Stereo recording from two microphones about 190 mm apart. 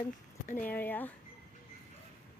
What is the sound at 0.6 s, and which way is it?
Speech, 10° left (ahead or behind).